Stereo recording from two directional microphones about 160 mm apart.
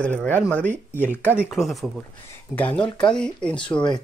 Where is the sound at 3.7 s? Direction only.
30° left (ahead or behind).